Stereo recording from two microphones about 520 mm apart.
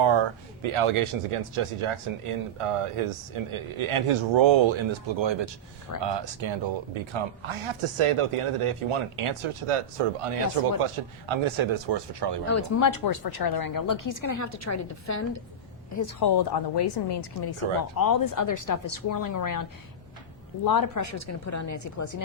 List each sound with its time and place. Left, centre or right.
0.0 s speech: right
10.8 s speech: right
12.5 s a woman's voice: left
20.7 s speech: left